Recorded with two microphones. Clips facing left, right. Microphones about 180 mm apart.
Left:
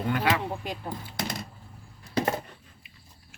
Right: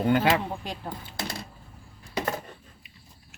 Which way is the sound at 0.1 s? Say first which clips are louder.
Right 3 dB; 25° right (ahead or behind).